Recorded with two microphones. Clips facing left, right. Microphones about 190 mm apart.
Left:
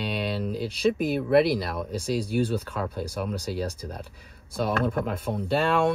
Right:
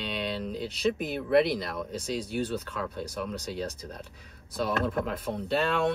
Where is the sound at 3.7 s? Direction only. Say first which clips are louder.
Left 4 dB; 30° left (ahead or behind).